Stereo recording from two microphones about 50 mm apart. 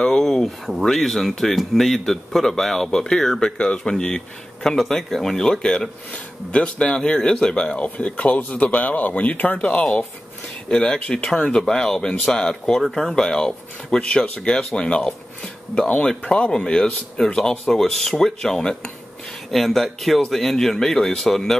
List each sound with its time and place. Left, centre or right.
0.0 s a sound: centre
0.8 s speech: centre
8.7 s speech: left
17.4 s speech: centre
19.5 s speech: centre